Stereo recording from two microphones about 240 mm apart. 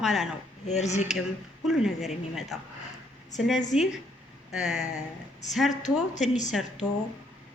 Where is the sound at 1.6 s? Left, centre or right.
Centre.